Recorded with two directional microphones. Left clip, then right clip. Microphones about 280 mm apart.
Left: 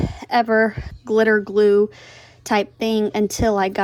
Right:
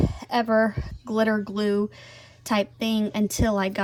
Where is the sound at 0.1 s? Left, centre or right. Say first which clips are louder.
Left 7 dB; left.